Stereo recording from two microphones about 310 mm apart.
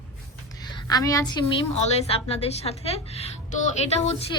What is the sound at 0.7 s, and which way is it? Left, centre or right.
A woman's voice, centre.